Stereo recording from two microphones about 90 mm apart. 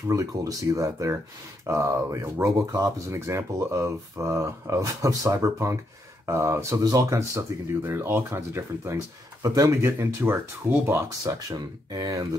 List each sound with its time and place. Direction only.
0.1 s speech: 40° right (ahead or behind)
11.1 s speech: 45° right (ahead or behind)